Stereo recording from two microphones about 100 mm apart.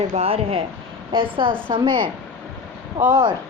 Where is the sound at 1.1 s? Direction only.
60° right (ahead or behind).